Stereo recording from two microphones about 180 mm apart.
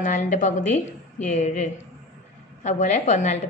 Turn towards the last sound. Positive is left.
turn(degrees=40)  # may be behind; listen again after turning